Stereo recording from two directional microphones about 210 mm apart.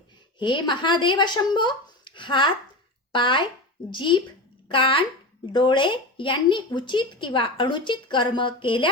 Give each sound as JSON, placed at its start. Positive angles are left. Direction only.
{"t": 0.3, "sound": "speech", "side_deg": 20}